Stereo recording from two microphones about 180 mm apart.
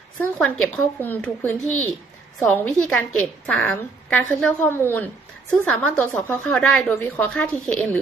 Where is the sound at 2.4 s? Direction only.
5° left (ahead or behind).